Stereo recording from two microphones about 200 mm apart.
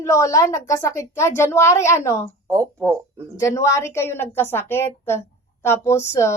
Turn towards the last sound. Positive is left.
turn(degrees=15)  # may be behind; listen again after turning